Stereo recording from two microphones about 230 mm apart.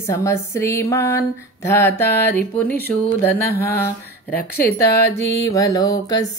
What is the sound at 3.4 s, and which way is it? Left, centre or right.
Mantra, left.